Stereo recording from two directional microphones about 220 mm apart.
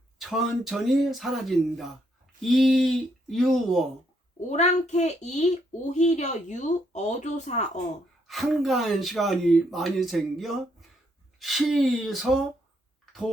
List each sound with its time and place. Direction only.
0.2 s speech: centre (ahead or behind)
4.4 s a child's voice: 30° left (ahead or behind)
8.3 s speech: centre (ahead or behind)